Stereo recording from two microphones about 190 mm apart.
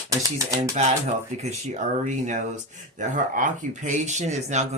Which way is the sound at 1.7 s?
40° right (ahead or behind).